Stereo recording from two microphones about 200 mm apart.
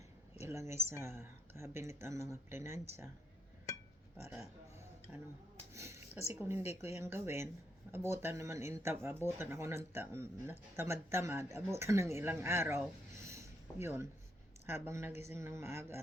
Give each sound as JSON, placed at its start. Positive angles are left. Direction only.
{"t": 0.4, "sound": "a woman's voice", "side_deg": -15}
{"t": 4.2, "sound": "speech", "side_deg": -15}
{"t": 5.7, "sound": "a sound", "side_deg": -15}
{"t": 6.4, "sound": "speech", "side_deg": -10}
{"t": 13.1, "sound": "a sound", "side_deg": -15}
{"t": 14.7, "sound": "speech", "side_deg": -15}